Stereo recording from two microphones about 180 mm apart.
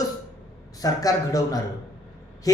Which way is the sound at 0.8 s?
20° left (ahead or behind).